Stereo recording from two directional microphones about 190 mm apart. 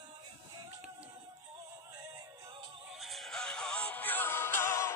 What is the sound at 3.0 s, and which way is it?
Music, centre (ahead or behind).